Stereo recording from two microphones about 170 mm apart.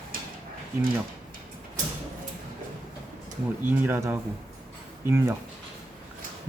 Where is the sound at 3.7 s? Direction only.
10° right (ahead or behind).